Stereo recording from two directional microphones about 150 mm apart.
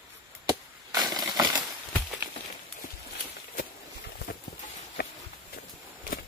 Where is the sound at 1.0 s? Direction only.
30° right (ahead or behind).